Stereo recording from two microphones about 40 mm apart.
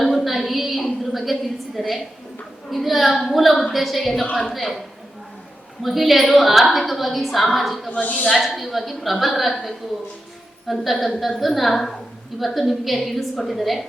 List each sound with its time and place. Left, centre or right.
0.0 s a sound: centre
2.6 s a woman's voice: centre
5.8 s a woman's voice: centre
8.0 s a woman's voice: left
8.3 s a woman's voice: centre